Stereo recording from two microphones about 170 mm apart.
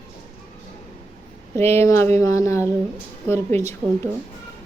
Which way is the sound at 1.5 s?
15° left (ahead or behind).